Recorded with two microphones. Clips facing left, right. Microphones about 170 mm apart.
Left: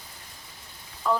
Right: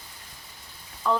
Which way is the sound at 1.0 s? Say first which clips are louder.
Even; centre (ahead or behind).